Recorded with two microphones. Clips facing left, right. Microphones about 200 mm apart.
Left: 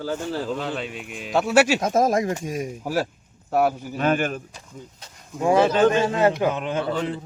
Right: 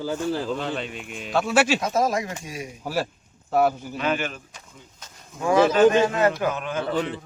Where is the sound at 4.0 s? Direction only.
45° left (ahead or behind).